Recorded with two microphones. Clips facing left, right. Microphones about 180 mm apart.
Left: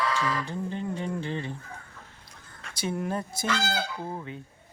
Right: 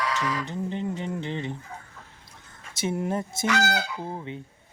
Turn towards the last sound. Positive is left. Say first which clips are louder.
# right 2 dB
turn(degrees=-20)  # may be behind; listen again after turning